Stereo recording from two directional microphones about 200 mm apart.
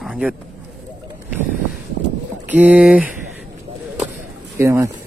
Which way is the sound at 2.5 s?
5° right (ahead or behind).